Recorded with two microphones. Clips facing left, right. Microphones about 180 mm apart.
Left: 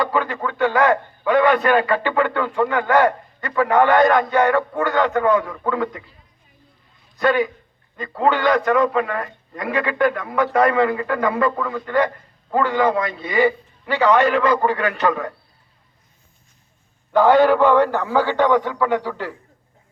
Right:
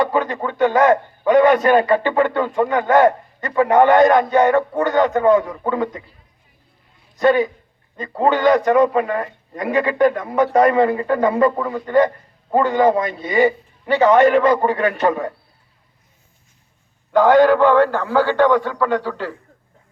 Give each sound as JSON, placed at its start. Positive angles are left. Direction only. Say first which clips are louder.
{"t": 0.1, "sound": "a man's voice", "louder": "right 2 dB", "side_deg": -20}
{"t": 0.9, "sound": "a man's voice", "louder": "right 3 dB", "side_deg": -40}
{"t": 1.6, "sound": "a man's voice", "louder": "right 3 dB", "side_deg": -25}
{"t": 7.2, "sound": "a man's voice", "louder": "right 3 dB", "side_deg": -25}
{"t": 8.7, "sound": "a man's voice", "louder": "right 3 dB", "side_deg": -40}
{"t": 9.0, "sound": "a man's voice", "louder": "right 2 dB", "side_deg": -25}
{"t": 17.1, "sound": "a man's voice", "louder": "right 2 dB", "side_deg": -15}
{"t": 17.7, "sound": "a man's voice", "louder": "right 2 dB", "side_deg": 15}